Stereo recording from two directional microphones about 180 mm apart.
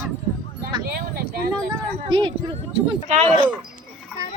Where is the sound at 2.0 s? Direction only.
25° right (ahead or behind).